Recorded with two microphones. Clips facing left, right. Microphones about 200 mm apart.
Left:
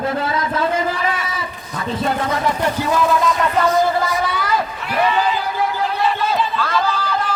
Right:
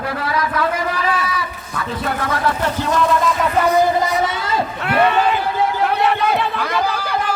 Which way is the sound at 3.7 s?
20° right (ahead or behind).